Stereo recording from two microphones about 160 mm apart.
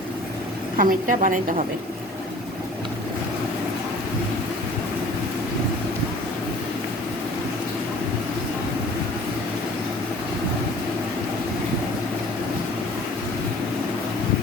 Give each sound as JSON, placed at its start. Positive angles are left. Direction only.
{"t": 0.8, "sound": "a woman's voice", "side_deg": -55}